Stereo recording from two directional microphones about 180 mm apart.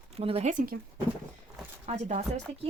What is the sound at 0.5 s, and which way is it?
Speech, 50° right (ahead or behind).